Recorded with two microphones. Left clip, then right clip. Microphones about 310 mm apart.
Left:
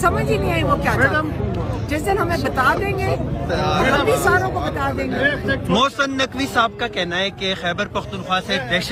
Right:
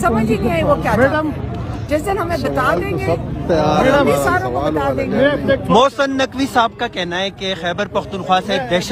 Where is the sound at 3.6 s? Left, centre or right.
Right.